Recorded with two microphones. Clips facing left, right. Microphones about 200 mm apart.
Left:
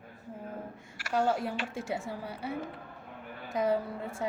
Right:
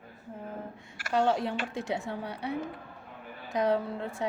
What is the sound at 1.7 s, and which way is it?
Speech, 5° left (ahead or behind).